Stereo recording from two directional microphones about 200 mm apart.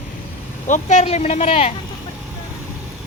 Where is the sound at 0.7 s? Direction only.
35° left (ahead or behind).